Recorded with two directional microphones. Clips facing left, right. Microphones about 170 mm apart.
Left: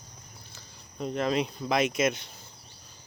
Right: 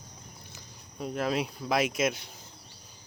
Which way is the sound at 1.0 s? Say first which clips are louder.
Left 2 dB; 5° right (ahead or behind).